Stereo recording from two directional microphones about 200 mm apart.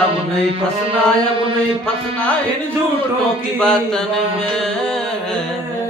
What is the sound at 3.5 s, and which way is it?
A man's voice, 5° left (ahead or behind).